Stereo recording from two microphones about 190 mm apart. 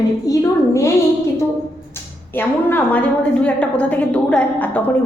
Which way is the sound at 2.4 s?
10° left (ahead or behind).